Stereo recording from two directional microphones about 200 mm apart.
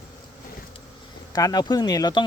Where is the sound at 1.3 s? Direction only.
20° left (ahead or behind).